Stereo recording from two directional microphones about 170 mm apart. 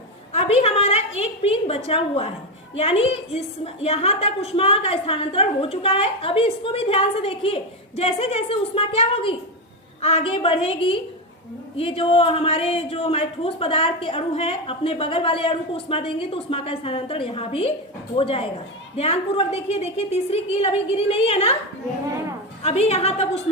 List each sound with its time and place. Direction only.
0.3 s a sound: 35° left (ahead or behind)
1.2 s a woman's voice: 35° left (ahead or behind)
22.6 s a woman's voice: 35° left (ahead or behind)